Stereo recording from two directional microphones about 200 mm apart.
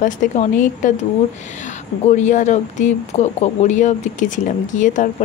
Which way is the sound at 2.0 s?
35° left (ahead or behind).